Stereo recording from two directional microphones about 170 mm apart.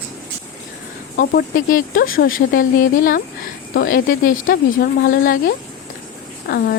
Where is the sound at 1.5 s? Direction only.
55° left (ahead or behind).